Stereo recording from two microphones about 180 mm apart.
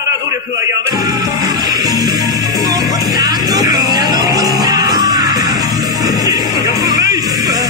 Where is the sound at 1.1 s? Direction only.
20° right (ahead or behind).